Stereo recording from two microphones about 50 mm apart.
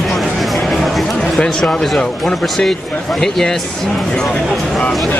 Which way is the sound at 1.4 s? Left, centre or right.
Centre.